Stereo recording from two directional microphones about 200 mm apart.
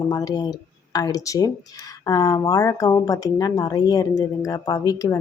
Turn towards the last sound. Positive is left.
turn(degrees=20)  # may be behind; listen again after turning